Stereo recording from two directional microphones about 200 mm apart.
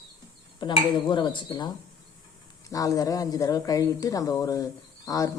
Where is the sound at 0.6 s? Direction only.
25° left (ahead or behind).